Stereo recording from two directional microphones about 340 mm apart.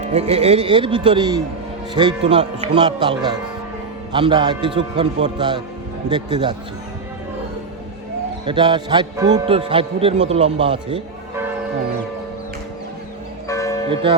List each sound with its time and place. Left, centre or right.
0.0 s a man's voice: centre
8.4 s a man's voice: centre
13.5 s church bell: centre
13.9 s a man's voice: centre